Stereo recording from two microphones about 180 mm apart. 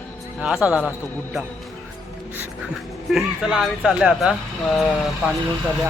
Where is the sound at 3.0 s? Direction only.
Centre (ahead or behind).